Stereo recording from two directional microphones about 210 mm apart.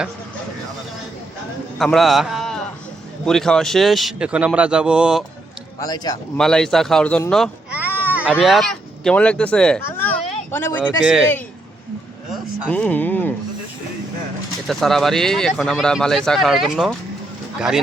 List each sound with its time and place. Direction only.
1.8 s a man's voice: centre (ahead or behind)
5.8 s speech: 20° left (ahead or behind)
6.3 s speech: 5° left (ahead or behind)
11.0 s speech: 5° right (ahead or behind)
12.3 s speech: 5° left (ahead or behind)
14.7 s speech: centre (ahead or behind)